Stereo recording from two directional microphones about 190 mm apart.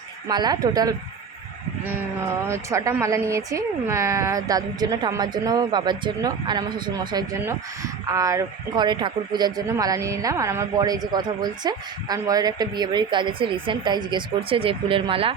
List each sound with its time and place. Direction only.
0.3 s a woman's voice: 20° right (ahead or behind)